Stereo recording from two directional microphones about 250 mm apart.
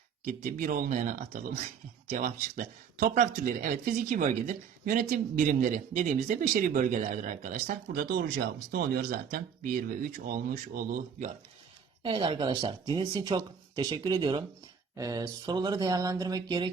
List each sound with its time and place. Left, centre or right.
0.3 s speech: right
12.0 s speech: centre